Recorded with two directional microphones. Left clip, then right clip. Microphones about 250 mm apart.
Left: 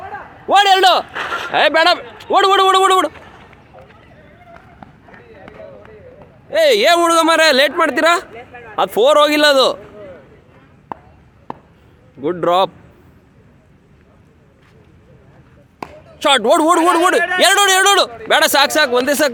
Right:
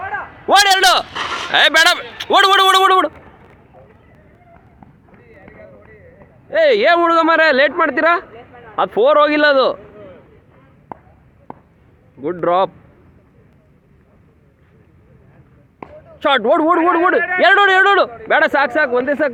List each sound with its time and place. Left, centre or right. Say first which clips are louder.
0.4 s speech: left 1 dB; centre
1.1 s a sound: even; right
1.5 s speech: right 1 dB; centre
6.5 s speech: even; centre
12.2 s a man's voice: left 1 dB; centre
15.8 s speech: left 1 dB; centre
17.2 s a man's voice: left 1 dB; left
17.4 s speech: right 2 dB; centre